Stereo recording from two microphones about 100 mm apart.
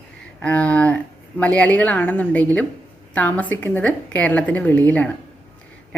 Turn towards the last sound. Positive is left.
turn(degrees=15)  # may be behind; listen again after turning